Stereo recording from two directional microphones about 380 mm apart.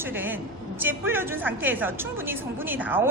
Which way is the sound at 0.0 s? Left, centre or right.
Centre.